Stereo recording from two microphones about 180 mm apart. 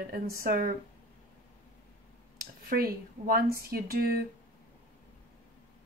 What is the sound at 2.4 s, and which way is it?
Speech, 55° right (ahead or behind).